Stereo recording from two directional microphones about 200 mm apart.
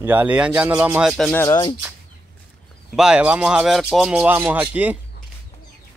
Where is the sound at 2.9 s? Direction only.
5° right (ahead or behind).